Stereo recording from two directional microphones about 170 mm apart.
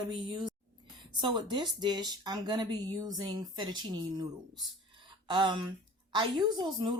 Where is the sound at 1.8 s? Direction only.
25° right (ahead or behind).